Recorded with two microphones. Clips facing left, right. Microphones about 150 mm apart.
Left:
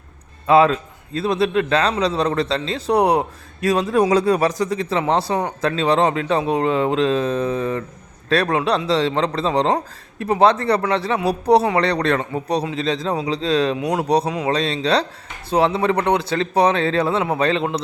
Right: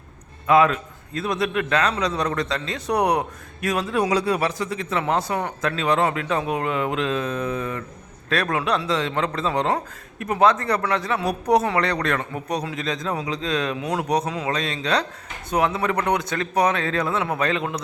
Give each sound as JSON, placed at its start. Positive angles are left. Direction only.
{"t": 0.4, "sound": "a man's voice", "side_deg": 30}
{"t": 4.1, "sound": "speech", "side_deg": 45}
{"t": 14.3, "sound": "speech", "side_deg": 15}
{"t": 14.5, "sound": "a man's voice", "side_deg": 30}